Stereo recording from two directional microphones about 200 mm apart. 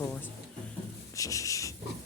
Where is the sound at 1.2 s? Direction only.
15° left (ahead or behind).